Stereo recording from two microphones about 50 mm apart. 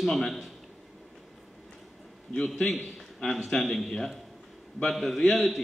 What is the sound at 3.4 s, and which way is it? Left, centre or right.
A man's voice, centre.